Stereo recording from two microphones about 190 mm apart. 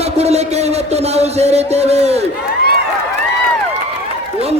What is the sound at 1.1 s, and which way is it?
Speech, 35° right (ahead or behind).